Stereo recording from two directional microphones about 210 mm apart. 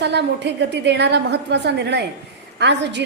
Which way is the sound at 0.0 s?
55° right (ahead or behind).